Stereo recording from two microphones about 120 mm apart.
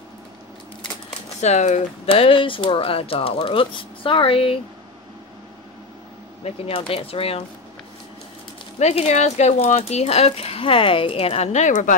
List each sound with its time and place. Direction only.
1.4 s speech: 75° left (ahead or behind)
2.2 s speech: 45° left (ahead or behind)
6.4 s speech: 55° left (ahead or behind)
8.7 s speech: 65° left (ahead or behind); by 11.9 s 90° left